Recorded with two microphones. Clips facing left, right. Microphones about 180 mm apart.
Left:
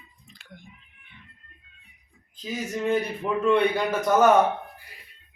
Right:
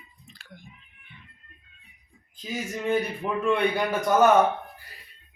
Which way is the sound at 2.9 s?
10° right (ahead or behind).